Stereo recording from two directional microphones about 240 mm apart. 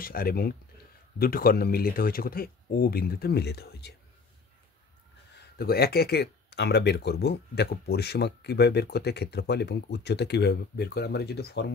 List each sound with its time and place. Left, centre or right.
0.0 s speech: left
5.6 s speech: left